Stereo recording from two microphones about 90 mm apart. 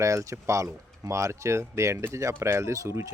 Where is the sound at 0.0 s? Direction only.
35° right (ahead or behind).